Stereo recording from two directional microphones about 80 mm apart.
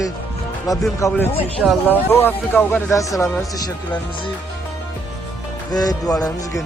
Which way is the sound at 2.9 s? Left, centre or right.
Left.